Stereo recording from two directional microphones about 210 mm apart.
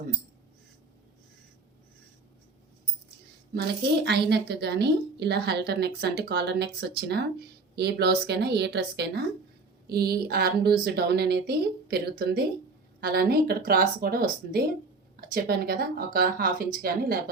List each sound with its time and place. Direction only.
4.0 s speech: 50° right (ahead or behind)